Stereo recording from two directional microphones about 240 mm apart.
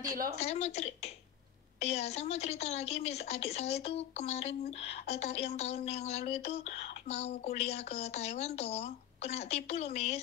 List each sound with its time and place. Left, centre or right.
0.4 s a woman's voice: left